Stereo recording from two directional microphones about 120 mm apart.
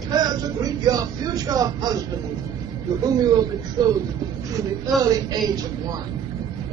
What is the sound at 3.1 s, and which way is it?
Speech, 35° right (ahead or behind).